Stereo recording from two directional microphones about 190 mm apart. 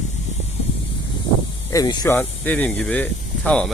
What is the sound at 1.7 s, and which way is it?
Speech, 20° left (ahead or behind).